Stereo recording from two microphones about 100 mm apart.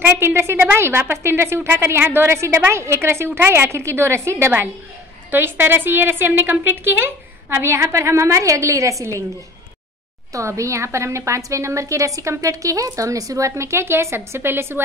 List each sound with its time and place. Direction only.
0.0 s a woman's voice: 20° right (ahead or behind)
10.3 s a woman's voice: 30° right (ahead or behind)